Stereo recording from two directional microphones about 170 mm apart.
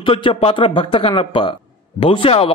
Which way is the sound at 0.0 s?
30° left (ahead or behind).